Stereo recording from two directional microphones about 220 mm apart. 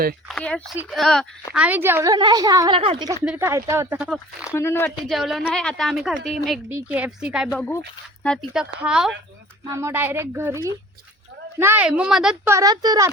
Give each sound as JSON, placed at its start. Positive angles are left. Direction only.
{"t": 0.3, "sound": "a woman's voice", "side_deg": 5}
{"t": 3.2, "sound": "a woman's voice", "side_deg": -10}
{"t": 4.5, "sound": "speech", "side_deg": 10}
{"t": 4.9, "sound": "a woman's voice", "side_deg": 0}
{"t": 11.6, "sound": "a woman's voice", "side_deg": -10}
{"t": 12.5, "sound": "a woman's voice", "side_deg": -15}